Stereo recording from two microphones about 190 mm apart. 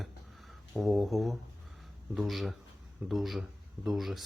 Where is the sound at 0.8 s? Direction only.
Centre (ahead or behind).